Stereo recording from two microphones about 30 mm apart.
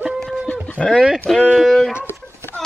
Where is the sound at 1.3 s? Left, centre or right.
Centre.